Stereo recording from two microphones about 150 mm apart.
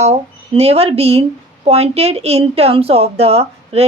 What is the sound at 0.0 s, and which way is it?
A woman's voice, 45° right (ahead or behind).